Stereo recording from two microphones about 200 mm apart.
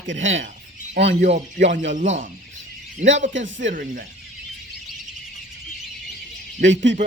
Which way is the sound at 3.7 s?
40° right (ahead or behind).